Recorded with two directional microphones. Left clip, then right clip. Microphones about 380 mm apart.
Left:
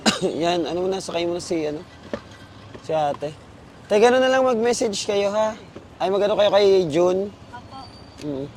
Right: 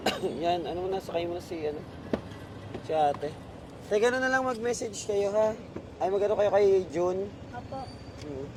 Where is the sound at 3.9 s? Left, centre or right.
Left.